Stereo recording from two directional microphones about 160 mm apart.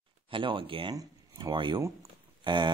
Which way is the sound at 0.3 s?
30° right (ahead or behind).